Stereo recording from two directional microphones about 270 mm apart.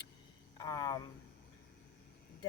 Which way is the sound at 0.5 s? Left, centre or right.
Centre.